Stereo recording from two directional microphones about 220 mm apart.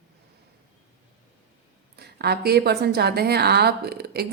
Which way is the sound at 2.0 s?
45° right (ahead or behind).